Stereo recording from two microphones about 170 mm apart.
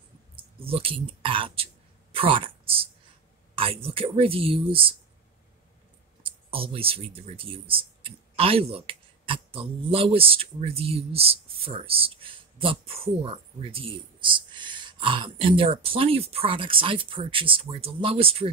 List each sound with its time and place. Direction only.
0.6 s speech: 35° right (ahead or behind)
6.2 s speech: 30° right (ahead or behind)